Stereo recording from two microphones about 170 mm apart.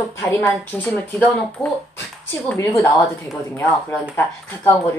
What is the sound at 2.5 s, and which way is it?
Speech, 20° left (ahead or behind).